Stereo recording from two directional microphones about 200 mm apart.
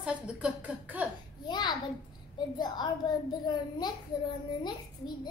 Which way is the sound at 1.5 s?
20° left (ahead or behind).